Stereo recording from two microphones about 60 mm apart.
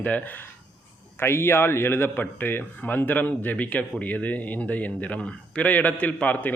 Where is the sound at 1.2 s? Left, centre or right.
Left.